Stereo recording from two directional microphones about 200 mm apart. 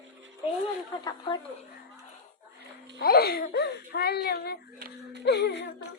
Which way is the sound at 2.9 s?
50° left (ahead or behind).